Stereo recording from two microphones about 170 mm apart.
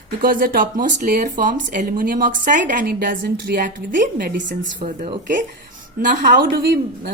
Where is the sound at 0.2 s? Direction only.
55° right (ahead or behind).